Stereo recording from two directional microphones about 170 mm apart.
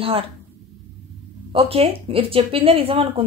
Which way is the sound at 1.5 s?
35° right (ahead or behind).